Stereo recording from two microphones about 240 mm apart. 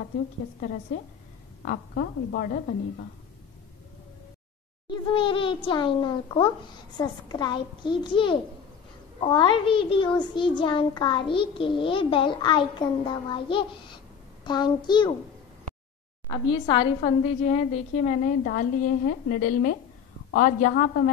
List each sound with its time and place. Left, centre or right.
1.6 s a woman's voice: left
4.8 s a child's voice: left
16.3 s a woman's voice: centre
17.5 s a woman's voice: left